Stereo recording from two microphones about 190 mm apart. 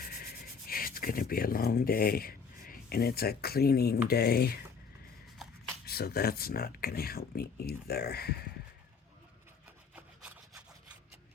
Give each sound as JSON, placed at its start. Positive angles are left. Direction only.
{"t": 0.0, "sound": "rub", "side_deg": 50}
{"t": 4.1, "sound": "speech", "side_deg": 55}
{"t": 5.8, "sound": "speech", "side_deg": 55}
{"t": 9.9, "sound": "wood", "side_deg": -10}